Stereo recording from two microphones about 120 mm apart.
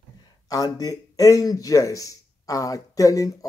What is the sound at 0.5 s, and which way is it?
Speech, 30° left (ahead or behind).